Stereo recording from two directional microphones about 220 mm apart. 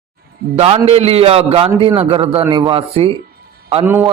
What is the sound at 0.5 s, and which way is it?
A man's voice, 25° right (ahead or behind).